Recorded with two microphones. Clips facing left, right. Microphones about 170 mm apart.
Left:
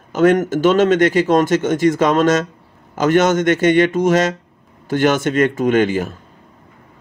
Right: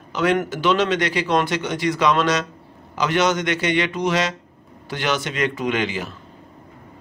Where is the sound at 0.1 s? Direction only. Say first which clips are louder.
Left 7 dB; 45° left (ahead or behind).